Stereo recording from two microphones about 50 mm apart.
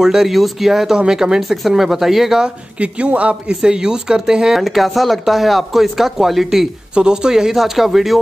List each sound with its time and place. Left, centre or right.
0.0 s speech: centre
2.4 s speech: right
3.6 s speech: centre
4.6 s speech: centre